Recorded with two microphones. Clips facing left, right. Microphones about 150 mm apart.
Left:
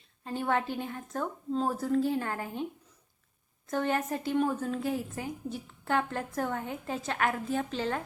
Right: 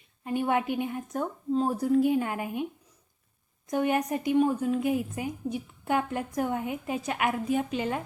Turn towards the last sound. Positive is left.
turn(degrees=-10)  # may be behind; listen again after turning